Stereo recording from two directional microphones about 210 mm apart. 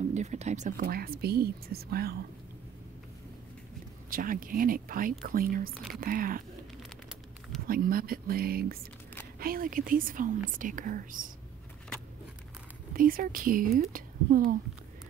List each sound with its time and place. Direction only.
0.1 s speech: 35° right (ahead or behind)
4.1 s speech: 40° right (ahead or behind)
7.6 s speech: 45° right (ahead or behind)
12.9 s a woman's voice: 40° right (ahead or behind)